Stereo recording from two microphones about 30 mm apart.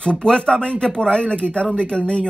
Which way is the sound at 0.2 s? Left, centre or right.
Left.